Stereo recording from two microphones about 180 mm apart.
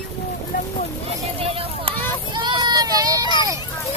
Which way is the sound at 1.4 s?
30° right (ahead or behind).